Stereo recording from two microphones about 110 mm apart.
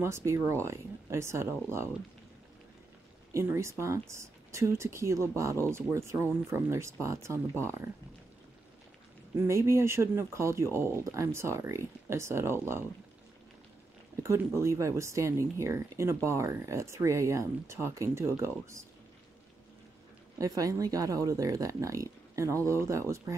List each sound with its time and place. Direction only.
0.0 s speech: 25° right (ahead or behind)
3.3 s speech: 25° right (ahead or behind)
9.4 s speech: 25° right (ahead or behind)
14.2 s speech: 25° right (ahead or behind)
20.3 s speech: 30° right (ahead or behind)